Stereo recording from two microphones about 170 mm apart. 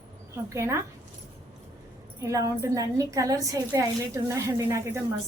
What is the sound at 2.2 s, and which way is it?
A woman's voice, 15° right (ahead or behind).